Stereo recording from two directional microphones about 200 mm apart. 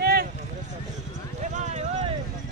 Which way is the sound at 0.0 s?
50° right (ahead or behind).